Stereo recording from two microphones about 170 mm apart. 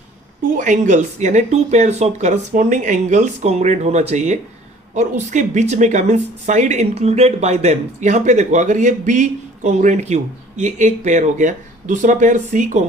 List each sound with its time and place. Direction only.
0.5 s speech: 45° right (ahead or behind)